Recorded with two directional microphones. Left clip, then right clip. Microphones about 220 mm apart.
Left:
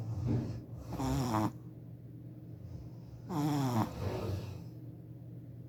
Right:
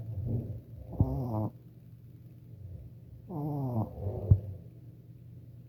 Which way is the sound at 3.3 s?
20° left (ahead or behind).